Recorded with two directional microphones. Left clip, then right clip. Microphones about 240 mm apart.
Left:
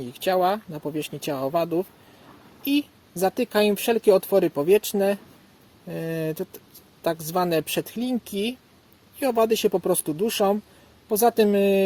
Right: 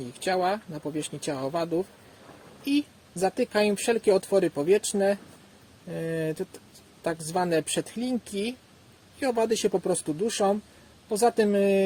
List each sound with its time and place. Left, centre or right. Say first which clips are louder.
0.0 s speech: left 4 dB; left